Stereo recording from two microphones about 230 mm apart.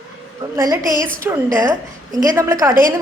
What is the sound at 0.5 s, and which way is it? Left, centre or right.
A woman's voice, centre.